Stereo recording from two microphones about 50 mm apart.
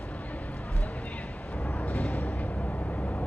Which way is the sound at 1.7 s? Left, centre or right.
Left.